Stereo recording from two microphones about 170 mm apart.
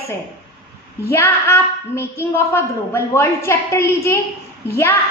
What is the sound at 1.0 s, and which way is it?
A woman's voice, 15° left (ahead or behind).